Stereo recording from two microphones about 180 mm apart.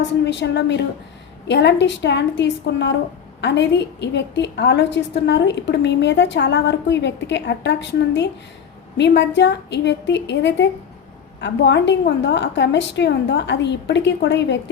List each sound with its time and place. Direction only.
0.0 s a woman's voice: 75° left (ahead or behind)